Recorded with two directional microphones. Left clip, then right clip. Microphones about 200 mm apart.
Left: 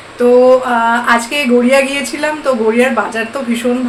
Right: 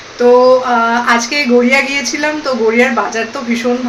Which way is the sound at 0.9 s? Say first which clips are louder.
Even; centre (ahead or behind).